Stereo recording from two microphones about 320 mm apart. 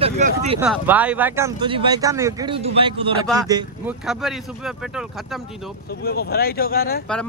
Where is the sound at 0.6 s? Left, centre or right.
Centre.